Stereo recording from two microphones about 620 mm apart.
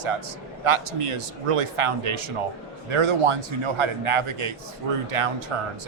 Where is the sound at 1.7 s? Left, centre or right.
Right.